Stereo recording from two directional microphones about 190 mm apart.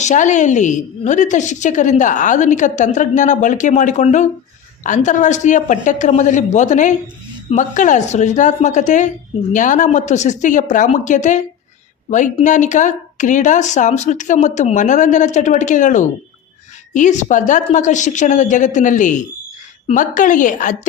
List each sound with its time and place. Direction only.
0.0 s a woman's voice: 40° left (ahead or behind)